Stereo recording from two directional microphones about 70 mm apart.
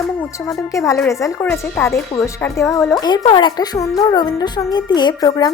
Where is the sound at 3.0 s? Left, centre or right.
Left.